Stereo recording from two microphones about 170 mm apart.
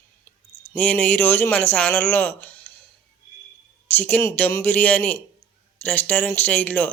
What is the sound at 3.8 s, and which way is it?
Speech, 10° left (ahead or behind).